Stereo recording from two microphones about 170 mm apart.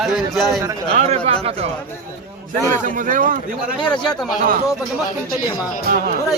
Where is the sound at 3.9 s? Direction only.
Centre (ahead or behind).